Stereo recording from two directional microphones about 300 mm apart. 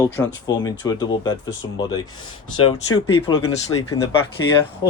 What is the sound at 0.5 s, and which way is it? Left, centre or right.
Speech, centre.